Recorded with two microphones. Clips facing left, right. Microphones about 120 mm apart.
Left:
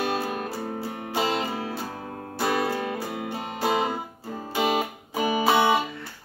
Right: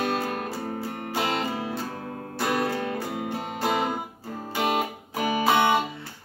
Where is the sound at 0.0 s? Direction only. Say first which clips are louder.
Even; 5° left (ahead or behind).